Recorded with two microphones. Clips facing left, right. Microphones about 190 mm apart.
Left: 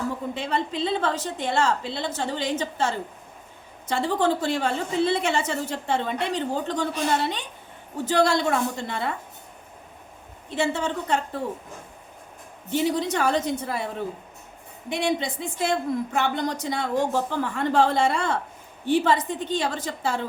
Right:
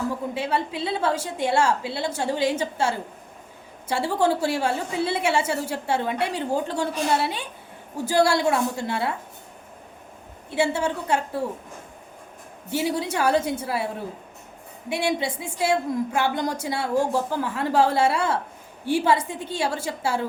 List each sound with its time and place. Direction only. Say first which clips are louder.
0.3 s a woman's voice: right 1 dB; 10° right (ahead or behind)
10.5 s a woman's voice: right 2 dB; 10° right (ahead or behind)
12.7 s a woman's voice: left 1 dB; 10° right (ahead or behind)